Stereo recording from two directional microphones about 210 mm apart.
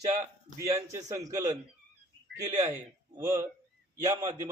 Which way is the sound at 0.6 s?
15° right (ahead or behind).